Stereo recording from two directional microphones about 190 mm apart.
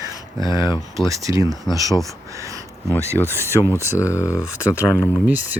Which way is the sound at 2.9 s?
15° right (ahead or behind).